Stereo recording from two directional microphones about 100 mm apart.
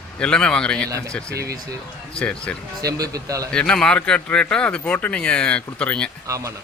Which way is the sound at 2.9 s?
35° right (ahead or behind).